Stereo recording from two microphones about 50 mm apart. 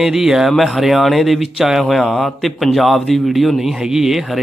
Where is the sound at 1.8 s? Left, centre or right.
Centre.